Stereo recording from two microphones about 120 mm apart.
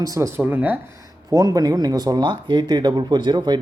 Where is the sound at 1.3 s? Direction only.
30° right (ahead or behind).